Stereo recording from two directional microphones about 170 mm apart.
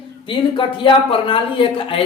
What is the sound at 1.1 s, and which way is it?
Speech, 30° left (ahead or behind).